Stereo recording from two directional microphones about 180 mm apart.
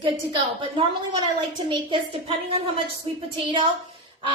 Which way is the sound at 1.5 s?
25° right (ahead or behind).